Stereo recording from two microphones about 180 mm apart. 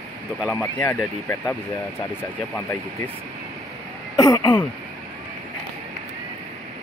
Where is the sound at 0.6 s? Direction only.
15° left (ahead or behind).